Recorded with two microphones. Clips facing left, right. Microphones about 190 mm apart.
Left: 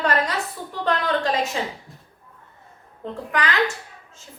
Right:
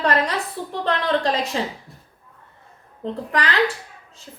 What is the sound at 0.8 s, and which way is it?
Speech, 35° right (ahead or behind).